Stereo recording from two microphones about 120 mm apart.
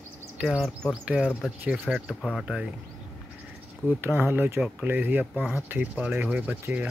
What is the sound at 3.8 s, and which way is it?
Speech, 15° right (ahead or behind).